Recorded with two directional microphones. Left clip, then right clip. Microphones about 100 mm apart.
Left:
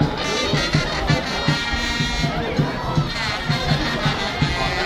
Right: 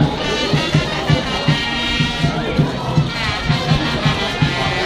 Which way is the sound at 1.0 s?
50° left (ahead or behind).